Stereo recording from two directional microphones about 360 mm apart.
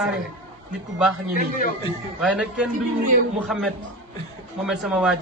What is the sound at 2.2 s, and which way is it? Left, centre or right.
A man's voice, centre.